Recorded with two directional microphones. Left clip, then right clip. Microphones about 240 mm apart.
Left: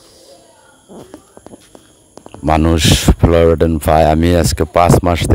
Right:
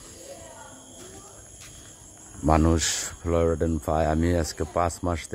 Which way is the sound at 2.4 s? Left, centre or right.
Left.